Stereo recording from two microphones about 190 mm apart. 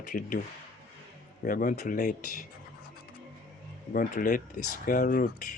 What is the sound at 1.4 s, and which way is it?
Speech, 45° left (ahead or behind).